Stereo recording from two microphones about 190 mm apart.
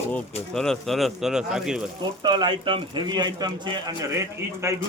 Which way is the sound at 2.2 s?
25° right (ahead or behind).